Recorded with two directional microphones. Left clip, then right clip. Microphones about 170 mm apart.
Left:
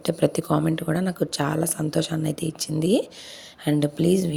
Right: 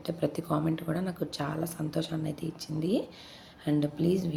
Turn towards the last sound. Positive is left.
turn(degrees=45)  # may be behind; listen again after turning